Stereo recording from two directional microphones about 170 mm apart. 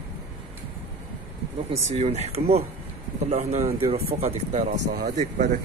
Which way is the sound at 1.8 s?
40° right (ahead or behind).